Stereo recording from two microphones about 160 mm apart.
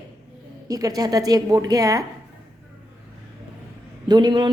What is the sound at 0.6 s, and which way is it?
A woman's voice, 20° right (ahead or behind).